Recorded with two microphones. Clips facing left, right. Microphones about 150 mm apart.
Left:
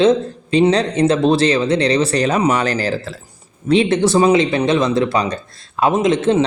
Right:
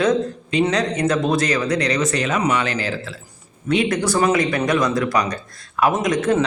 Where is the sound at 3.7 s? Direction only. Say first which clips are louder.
Left 5 dB; 30° left (ahead or behind).